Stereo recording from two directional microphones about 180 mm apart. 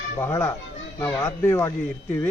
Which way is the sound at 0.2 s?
15° left (ahead or behind).